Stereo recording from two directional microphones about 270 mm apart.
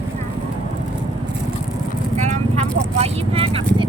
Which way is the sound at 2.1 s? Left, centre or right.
Right.